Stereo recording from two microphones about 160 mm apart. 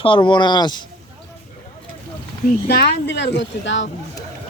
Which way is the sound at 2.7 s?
85° left.